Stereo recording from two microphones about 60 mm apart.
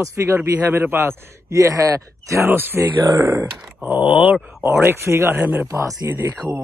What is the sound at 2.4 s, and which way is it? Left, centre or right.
Speech, right.